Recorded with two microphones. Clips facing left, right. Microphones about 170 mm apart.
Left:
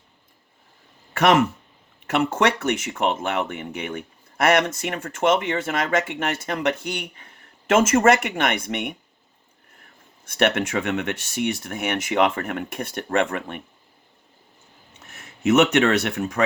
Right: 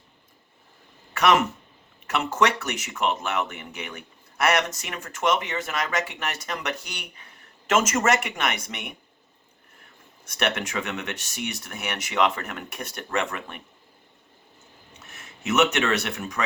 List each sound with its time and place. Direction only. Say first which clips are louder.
1.1 s a sound: left 3 dB; 55° left (ahead or behind)
2.0 s speech: left 3 dB; 55° left (ahead or behind)
10.2 s speech: left 6 dB; 55° left (ahead or behind)
15.1 s speech: left 7 dB; 55° left (ahead or behind)